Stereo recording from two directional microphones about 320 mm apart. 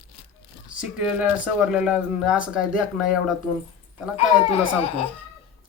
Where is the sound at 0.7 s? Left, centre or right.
Centre.